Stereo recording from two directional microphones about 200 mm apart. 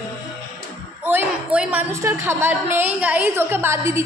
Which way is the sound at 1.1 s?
10° right (ahead or behind).